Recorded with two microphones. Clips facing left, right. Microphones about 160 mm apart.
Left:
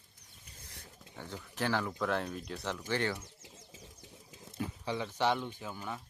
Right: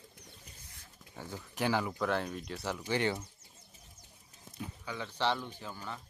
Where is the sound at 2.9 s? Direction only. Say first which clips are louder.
Right 2 dB; 15° right (ahead or behind).